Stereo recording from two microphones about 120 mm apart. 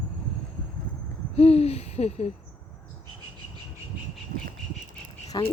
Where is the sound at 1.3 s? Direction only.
60° left (ahead or behind).